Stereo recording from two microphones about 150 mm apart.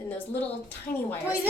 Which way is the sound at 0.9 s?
75° left (ahead or behind).